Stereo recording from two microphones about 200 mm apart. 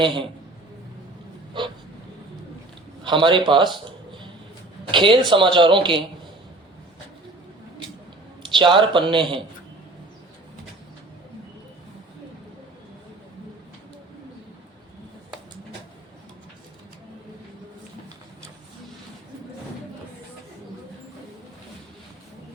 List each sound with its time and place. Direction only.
1.5 s speech: 25° right (ahead or behind)
3.0 s a man's voice: 25° right (ahead or behind)
8.4 s speech: 25° right (ahead or behind)